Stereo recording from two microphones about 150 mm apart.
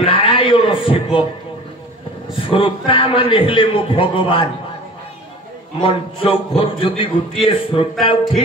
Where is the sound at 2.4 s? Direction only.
35° left (ahead or behind).